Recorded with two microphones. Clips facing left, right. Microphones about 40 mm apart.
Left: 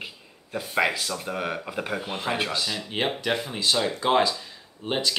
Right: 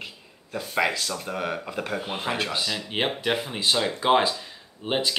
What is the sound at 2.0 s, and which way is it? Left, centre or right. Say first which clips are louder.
Speech: even; centre.